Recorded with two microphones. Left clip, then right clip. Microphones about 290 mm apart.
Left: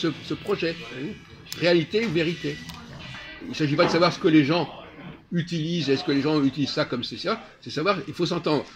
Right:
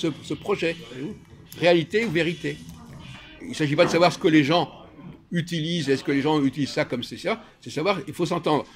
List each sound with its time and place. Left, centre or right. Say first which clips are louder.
0.0 s speech: even; right
3.5 s speech: right 1 dB; right